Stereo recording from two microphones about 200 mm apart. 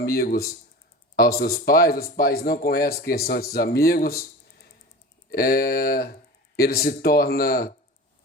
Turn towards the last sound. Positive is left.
turn(degrees=50)  # may be behind; listen again after turning